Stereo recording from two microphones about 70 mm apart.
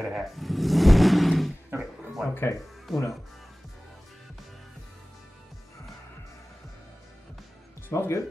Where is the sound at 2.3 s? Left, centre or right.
Left.